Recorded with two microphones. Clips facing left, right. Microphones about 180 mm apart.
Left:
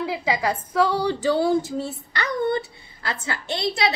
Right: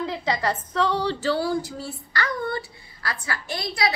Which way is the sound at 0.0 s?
10° left (ahead or behind).